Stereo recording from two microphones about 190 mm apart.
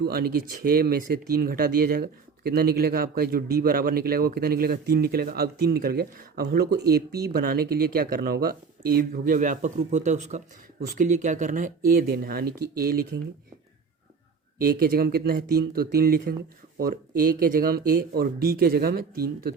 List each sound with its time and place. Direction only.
0.0 s speech: 55° right (ahead or behind)
14.6 s speech: 55° right (ahead or behind)